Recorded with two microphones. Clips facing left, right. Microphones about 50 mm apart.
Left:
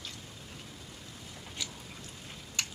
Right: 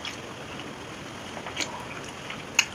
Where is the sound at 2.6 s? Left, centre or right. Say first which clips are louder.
Right 11 dB; right.